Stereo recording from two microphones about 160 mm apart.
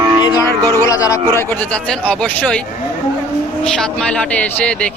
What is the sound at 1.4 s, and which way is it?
Speech, 10° left (ahead or behind).